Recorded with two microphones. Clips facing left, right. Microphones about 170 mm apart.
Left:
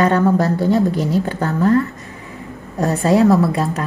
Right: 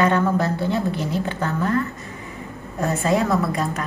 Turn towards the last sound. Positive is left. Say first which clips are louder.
# left 6 dB
turn(degrees=30)  # may be behind; listen again after turning